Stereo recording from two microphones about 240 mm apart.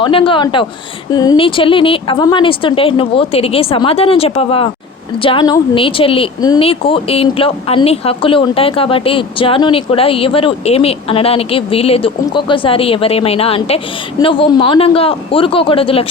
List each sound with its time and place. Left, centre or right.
0.0 s speech: left